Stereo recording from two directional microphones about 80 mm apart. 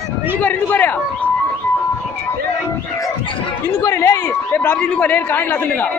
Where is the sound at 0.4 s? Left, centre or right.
Left.